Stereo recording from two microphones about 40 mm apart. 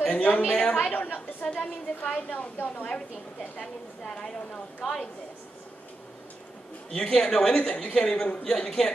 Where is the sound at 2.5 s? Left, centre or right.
Left.